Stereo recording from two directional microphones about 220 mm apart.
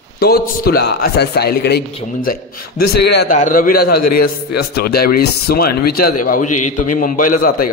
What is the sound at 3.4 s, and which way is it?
A man's voice, 40° left (ahead or behind).